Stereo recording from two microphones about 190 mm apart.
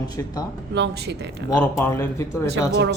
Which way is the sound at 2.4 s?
65° right (ahead or behind).